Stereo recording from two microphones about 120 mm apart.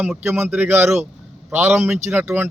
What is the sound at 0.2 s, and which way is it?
A man's voice, 10° right (ahead or behind).